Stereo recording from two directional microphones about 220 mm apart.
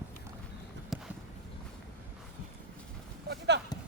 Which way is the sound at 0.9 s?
Centre (ahead or behind).